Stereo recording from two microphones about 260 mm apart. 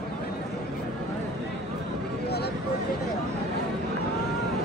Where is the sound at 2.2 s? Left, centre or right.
Left.